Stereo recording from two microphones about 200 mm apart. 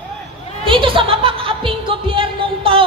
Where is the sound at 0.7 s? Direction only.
25° right (ahead or behind).